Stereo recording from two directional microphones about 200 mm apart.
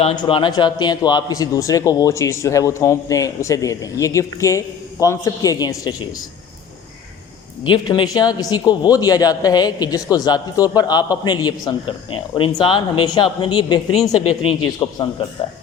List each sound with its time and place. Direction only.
0.0 s a man's voice: 25° left (ahead or behind)
7.6 s a man's voice: 25° left (ahead or behind)